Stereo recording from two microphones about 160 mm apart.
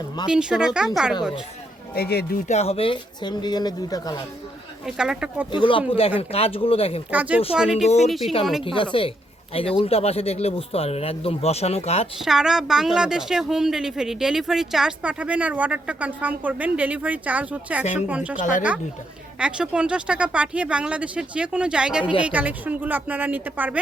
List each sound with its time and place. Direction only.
0.3 s speech: 5° right (ahead or behind)
2.0 s speech: 75° left (ahead or behind)
2.5 s speech: 40° left (ahead or behind); by 4.2 s 25° left (ahead or behind)
4.9 s speech: 5° right (ahead or behind)
5.5 s speech: 30° left (ahead or behind)
7.1 s speech: 10° right (ahead or behind)
7.9 s speech: 45° left (ahead or behind)
8.6 s speech: 30° left (ahead or behind)
12.2 s speech: 5° right (ahead or behind)
18.3 s speech: 55° left (ahead or behind)
19.4 s speech: 5° right (ahead or behind)